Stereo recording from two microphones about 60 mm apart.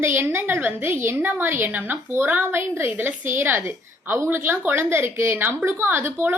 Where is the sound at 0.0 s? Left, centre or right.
Right.